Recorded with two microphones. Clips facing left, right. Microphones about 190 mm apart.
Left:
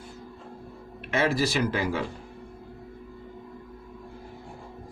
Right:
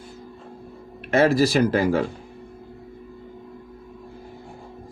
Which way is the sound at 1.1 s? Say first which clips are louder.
Right 7 dB; 40° right (ahead or behind).